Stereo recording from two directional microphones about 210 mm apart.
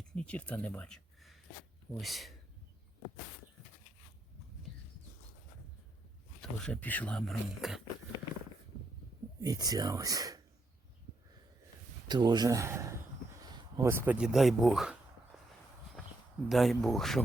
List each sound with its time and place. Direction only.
0.2 s speech: 5° left (ahead or behind)
6.6 s speech: 5° left (ahead or behind)
9.4 s speech: 20° right (ahead or behind)
12.0 s speech: 20° right (ahead or behind); by 14.9 s centre (ahead or behind)
15.3 s walk: centre (ahead or behind)
16.5 s speech: centre (ahead or behind)